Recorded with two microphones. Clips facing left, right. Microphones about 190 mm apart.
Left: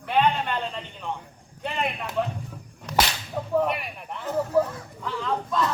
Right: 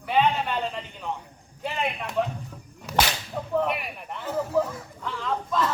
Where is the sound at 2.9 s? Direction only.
5° right (ahead or behind).